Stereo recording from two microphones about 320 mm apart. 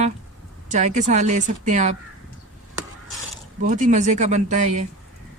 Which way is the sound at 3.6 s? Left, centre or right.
Right.